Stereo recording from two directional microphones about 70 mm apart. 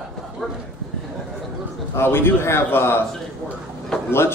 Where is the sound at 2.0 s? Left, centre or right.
Left.